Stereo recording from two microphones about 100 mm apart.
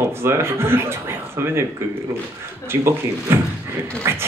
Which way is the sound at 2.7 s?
25° right (ahead or behind).